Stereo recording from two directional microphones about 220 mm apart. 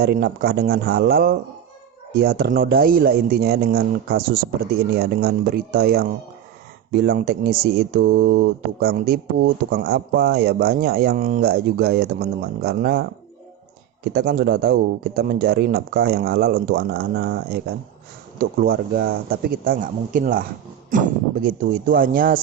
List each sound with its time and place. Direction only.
0.0 s speech: 45° right (ahead or behind)
21.4 s speech: 40° right (ahead or behind)